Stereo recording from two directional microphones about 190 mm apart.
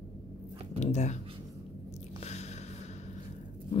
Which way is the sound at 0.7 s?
35° left (ahead or behind).